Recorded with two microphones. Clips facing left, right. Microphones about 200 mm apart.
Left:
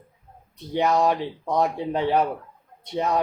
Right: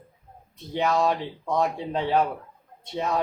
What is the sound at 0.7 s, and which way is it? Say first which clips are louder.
Speech: left 2 dB; 15° left (ahead or behind).